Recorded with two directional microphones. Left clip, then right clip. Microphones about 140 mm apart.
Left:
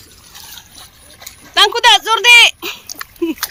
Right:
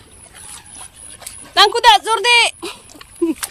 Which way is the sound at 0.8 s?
10° left (ahead or behind).